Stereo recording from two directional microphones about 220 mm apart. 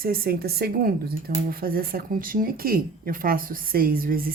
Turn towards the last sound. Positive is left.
turn(degrees=-40)  # may be behind; listen again after turning